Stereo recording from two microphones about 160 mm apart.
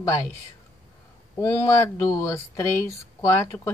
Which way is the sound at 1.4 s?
20° left (ahead or behind).